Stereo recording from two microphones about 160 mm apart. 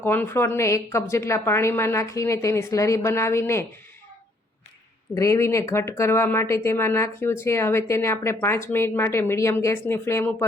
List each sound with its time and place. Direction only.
0.0 s speech: 15° left (ahead or behind)
5.1 s speech: 20° left (ahead or behind)